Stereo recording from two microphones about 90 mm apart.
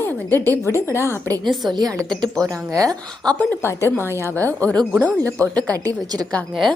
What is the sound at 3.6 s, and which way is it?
Speech, 25° left (ahead or behind).